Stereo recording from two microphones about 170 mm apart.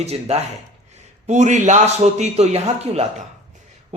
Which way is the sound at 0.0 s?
40° right (ahead or behind).